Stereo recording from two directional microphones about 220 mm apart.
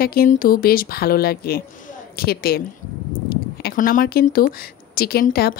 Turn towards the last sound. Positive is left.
turn(degrees=45)  # may be behind; listen again after turning